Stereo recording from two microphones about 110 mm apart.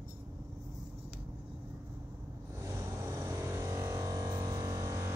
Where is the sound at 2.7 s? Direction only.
25° right (ahead or behind).